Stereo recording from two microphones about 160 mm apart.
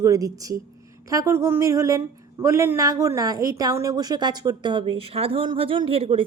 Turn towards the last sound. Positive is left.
turn(degrees=-35)  # may be behind; listen again after turning